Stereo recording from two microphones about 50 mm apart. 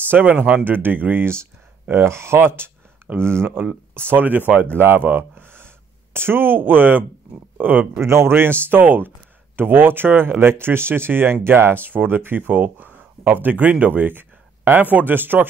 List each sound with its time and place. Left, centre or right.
0.1 s speech: right
2.0 s speech: right
8.0 s speech: right